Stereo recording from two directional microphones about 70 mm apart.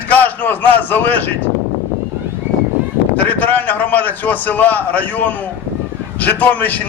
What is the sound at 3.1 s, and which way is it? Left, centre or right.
A man's voice, left.